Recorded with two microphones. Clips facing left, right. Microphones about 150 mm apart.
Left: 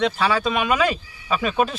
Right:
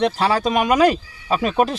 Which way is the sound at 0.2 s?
40° right (ahead or behind).